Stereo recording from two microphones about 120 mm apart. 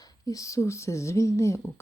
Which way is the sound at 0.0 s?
30° left (ahead or behind).